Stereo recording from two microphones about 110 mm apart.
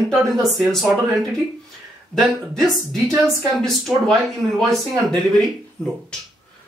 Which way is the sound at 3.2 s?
Centre (ahead or behind).